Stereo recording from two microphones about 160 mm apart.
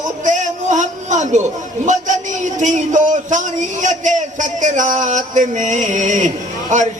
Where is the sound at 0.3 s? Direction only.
50° right (ahead or behind).